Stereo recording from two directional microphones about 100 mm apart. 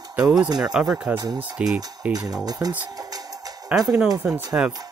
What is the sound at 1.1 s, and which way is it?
Speech, 45° right (ahead or behind).